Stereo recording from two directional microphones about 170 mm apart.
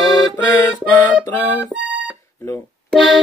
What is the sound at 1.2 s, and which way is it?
Speech, 10° left (ahead or behind).